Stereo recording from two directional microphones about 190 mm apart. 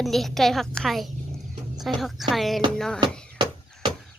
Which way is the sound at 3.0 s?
25° right (ahead or behind).